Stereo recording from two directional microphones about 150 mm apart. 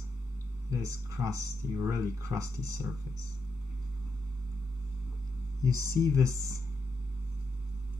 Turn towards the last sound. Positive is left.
turn(degrees=-20)  # may be behind; listen again after turning